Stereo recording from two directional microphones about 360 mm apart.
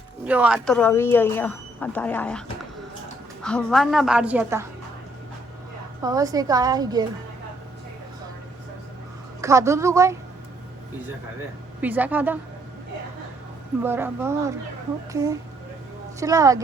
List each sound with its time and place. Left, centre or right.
0.3 s speech: centre
3.4 s speech: centre
6.0 s a woman's voice: centre
9.4 s a woman's voice: centre
11.8 s speech: centre
13.8 s a woman's voice: centre